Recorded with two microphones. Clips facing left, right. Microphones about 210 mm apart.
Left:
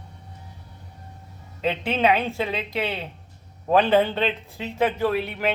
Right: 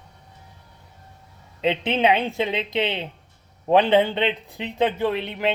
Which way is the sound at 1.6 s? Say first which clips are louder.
Right 1 dB; 20° right (ahead or behind).